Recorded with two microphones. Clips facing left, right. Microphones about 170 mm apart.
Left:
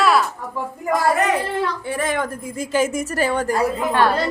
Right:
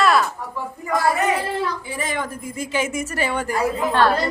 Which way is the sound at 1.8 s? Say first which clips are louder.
Left 4 dB; 60° left (ahead or behind).